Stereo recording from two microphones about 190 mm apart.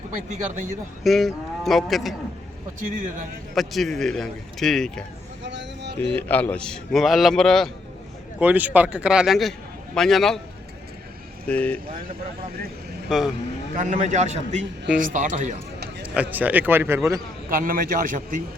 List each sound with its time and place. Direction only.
1.0 s speech: centre (ahead or behind)
2.9 s a man's voice: 45° right (ahead or behind)
3.5 s a man's voice: centre (ahead or behind)
5.4 s a sound: 70° right (ahead or behind)
6.1 s a man's voice: 10° left (ahead or behind)
8.4 s a man's voice: 10° right (ahead or behind)
11.4 s speech: 5° left (ahead or behind)
13.1 s speech: centre (ahead or behind)
13.7 s a man's voice: 40° right (ahead or behind)
16.0 s a man's voice: 10° right (ahead or behind)
17.5 s a man's voice: 45° right (ahead or behind)